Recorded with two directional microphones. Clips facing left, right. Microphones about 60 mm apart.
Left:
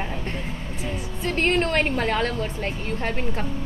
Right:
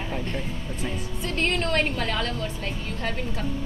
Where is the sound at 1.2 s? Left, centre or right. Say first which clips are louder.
Left 5 dB; left.